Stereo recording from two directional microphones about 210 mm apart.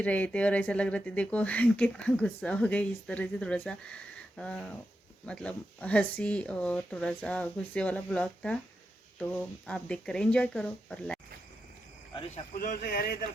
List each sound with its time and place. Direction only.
0.0 s speech: 5° left (ahead or behind)
12.5 s speech: 45° left (ahead or behind)